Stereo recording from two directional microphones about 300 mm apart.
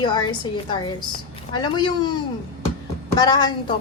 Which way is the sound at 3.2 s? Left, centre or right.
Centre.